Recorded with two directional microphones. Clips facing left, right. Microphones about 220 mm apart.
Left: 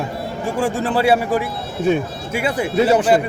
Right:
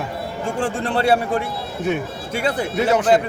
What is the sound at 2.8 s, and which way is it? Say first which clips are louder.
Speech: left 4 dB; 30° left (ahead or behind).